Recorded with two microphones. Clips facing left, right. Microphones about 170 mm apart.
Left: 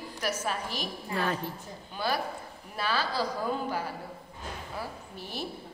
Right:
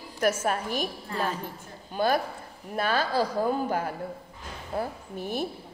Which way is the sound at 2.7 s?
50° right (ahead or behind).